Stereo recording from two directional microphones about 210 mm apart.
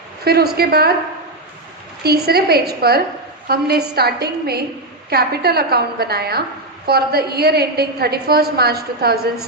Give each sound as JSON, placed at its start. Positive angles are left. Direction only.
{"t": 0.3, "sound": "a woman's voice", "side_deg": -50}
{"t": 2.0, "sound": "a woman's voice", "side_deg": -50}